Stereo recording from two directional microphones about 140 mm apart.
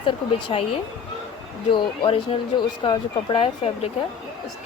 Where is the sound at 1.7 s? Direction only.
40° left (ahead or behind).